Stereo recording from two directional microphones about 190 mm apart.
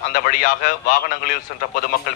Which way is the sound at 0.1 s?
45° left (ahead or behind).